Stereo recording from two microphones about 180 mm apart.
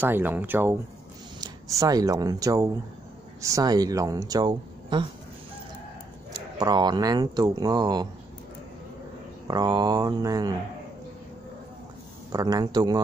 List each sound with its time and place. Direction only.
0.0 s speech: 10° right (ahead or behind)
1.8 s speech: 20° right (ahead or behind)
6.3 s speech: 25° right (ahead or behind)
9.5 s speech: 20° right (ahead or behind)
12.3 s speech: 20° right (ahead or behind)